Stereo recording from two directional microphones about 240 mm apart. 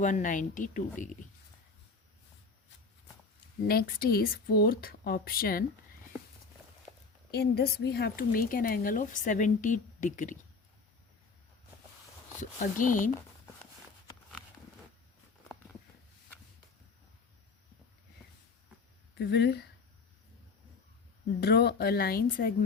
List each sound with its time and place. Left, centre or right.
0.0 s a woman's voice: left
3.7 s a woman's voice: left
7.3 s a woman's voice: left
12.4 s a woman's voice: left
19.1 s speech: left
21.4 s a woman's voice: left